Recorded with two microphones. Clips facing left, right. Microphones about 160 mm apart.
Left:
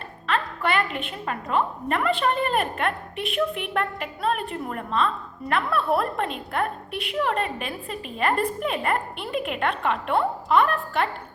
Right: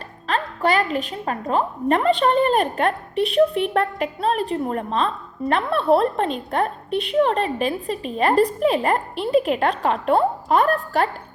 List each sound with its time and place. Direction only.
0.3 s a woman's voice: 35° right (ahead or behind)